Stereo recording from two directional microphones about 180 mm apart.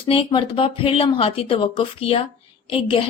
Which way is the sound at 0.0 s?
30° left (ahead or behind).